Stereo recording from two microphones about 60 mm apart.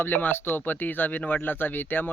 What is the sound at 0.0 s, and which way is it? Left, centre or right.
Speech, left.